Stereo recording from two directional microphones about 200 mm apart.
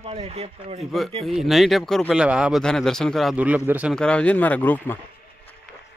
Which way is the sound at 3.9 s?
5° left (ahead or behind).